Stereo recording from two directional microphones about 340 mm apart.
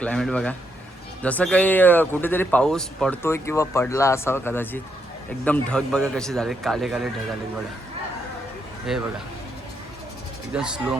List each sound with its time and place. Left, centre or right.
0.0 s a man's voice: centre
8.9 s a man's voice: centre
10.5 s a man's voice: centre